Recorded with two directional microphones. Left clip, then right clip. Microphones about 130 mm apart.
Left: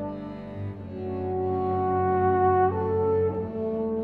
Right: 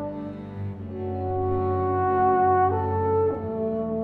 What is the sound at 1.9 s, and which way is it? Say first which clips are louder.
Music: right 3 dB; 30° right (ahead or behind).